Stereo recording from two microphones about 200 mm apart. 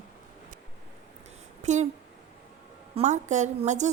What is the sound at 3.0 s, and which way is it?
Speech, 35° right (ahead or behind).